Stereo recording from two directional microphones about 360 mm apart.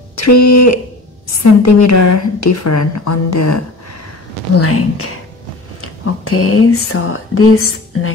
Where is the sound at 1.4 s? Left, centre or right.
Left.